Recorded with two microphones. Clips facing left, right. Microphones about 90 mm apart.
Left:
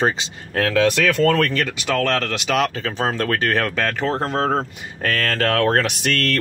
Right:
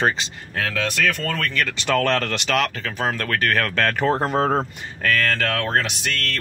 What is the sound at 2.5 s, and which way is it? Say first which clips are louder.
Speech: left 3 dB; 20° left (ahead or behind).